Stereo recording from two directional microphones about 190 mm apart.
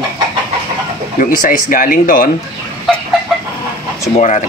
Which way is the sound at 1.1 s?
45° left (ahead or behind).